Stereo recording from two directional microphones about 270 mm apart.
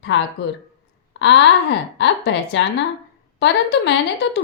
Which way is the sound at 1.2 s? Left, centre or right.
Left.